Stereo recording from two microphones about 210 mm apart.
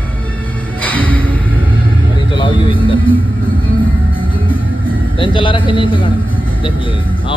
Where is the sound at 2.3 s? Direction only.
25° left (ahead or behind).